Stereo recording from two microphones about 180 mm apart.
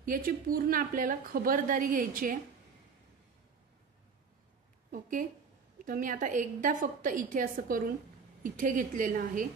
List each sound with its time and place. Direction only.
0.0 s a woman's voice: 50° right (ahead or behind)
5.9 s a woman's voice: 50° right (ahead or behind)